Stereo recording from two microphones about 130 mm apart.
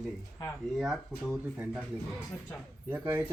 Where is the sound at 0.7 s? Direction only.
Centre (ahead or behind).